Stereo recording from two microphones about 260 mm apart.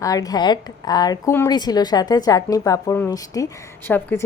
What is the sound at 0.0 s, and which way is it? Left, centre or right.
A woman's voice, centre.